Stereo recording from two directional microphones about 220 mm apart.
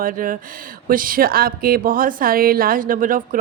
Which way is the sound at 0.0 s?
40° right (ahead or behind).